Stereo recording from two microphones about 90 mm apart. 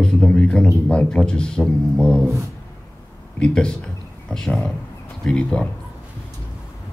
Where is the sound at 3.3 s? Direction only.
10° left (ahead or behind).